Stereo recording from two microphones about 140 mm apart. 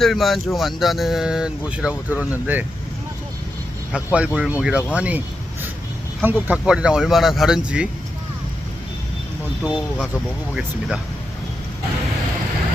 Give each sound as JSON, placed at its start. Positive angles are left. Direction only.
{"t": 0.0, "sound": "speech", "side_deg": 0}
{"t": 3.9, "sound": "speech", "side_deg": -10}
{"t": 6.2, "sound": "speech", "side_deg": -10}
{"t": 9.6, "sound": "speech", "side_deg": -5}